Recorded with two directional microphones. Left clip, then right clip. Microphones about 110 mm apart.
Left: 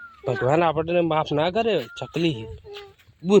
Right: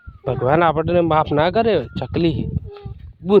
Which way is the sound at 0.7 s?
45° right (ahead or behind).